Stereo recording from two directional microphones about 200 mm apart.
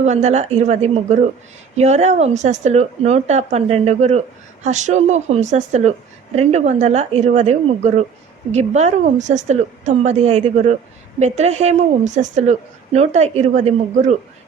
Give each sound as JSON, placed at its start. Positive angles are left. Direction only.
{"t": 0.0, "sound": "a woman's voice", "side_deg": -35}